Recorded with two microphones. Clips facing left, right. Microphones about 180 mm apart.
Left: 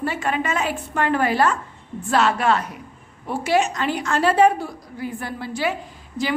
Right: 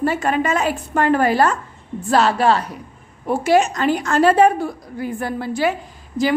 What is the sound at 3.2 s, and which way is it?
A woman's voice, 45° right (ahead or behind).